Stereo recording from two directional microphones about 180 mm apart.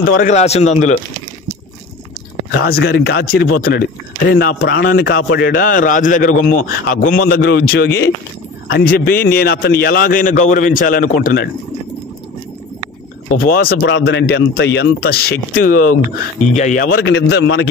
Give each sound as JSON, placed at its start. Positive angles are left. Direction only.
{"t": 0.1, "sound": "speech", "side_deg": 45}
{"t": 2.6, "sound": "a man's voice", "side_deg": 60}
{"t": 7.4, "sound": "speech", "side_deg": 65}
{"t": 13.3, "sound": "a man's voice", "side_deg": 55}
{"t": 17.0, "sound": "speech", "side_deg": 75}